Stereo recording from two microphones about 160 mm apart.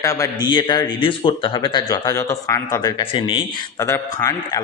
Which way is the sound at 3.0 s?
35° left (ahead or behind).